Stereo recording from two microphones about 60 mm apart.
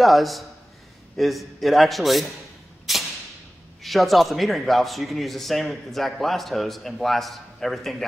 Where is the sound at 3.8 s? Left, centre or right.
Centre.